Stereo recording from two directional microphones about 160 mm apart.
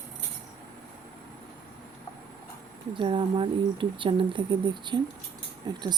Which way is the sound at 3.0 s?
30° right (ahead or behind).